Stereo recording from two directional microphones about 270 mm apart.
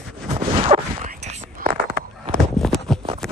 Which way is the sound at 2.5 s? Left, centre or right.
Centre.